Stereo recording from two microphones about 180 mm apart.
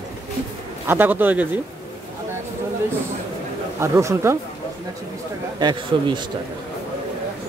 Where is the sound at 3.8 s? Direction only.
15° right (ahead or behind).